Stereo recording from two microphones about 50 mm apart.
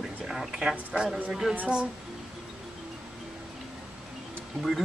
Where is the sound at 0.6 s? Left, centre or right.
Centre.